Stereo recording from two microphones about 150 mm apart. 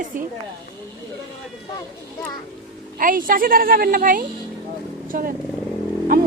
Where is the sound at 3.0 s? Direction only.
65° right (ahead or behind).